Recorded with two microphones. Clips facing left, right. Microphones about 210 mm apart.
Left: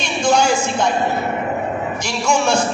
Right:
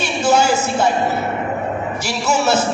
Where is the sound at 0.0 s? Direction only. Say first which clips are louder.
Right 1 dB; 5° right (ahead or behind).